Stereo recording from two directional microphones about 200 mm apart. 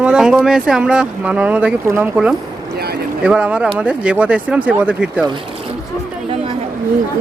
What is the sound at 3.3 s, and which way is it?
Speech, 5° right (ahead or behind).